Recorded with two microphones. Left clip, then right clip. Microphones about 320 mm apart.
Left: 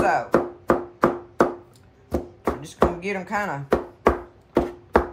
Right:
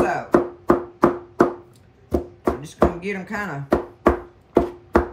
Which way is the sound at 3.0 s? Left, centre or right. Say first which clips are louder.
Left 2 dB; centre.